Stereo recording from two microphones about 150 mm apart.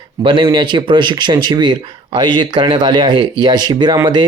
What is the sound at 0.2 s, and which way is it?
Speech, 35° right (ahead or behind).